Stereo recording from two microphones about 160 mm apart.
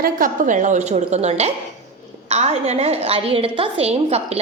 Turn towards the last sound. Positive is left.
turn(degrees=-40)  # may be behind; listen again after turning